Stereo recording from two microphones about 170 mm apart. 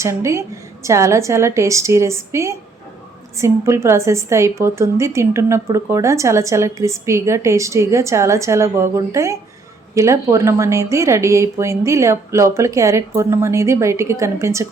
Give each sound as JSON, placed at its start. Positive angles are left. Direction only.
{"t": 0.0, "sound": "a woman's voice", "side_deg": -15}